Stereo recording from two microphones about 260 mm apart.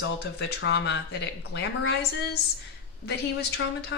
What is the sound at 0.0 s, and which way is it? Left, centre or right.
Speech, left.